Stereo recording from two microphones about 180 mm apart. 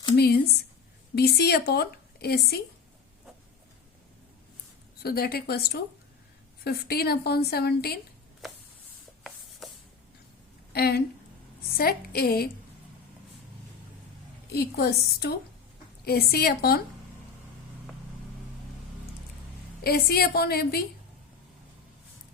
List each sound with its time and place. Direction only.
0.2 s a woman's voice: 60° left (ahead or behind)
5.0 s a woman's voice: 60° left (ahead or behind)
8.4 s a sound: centre (ahead or behind)
9.6 s a sound: centre (ahead or behind)
10.7 s a woman's voice: 60° left (ahead or behind)
14.5 s a woman's voice: 65° left (ahead or behind)
19.8 s a woman's voice: 60° left (ahead or behind)